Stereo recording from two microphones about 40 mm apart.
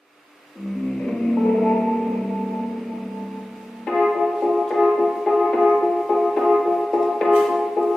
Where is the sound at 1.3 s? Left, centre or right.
Centre.